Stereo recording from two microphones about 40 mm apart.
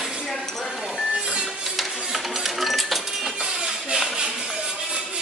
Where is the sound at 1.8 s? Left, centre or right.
Centre.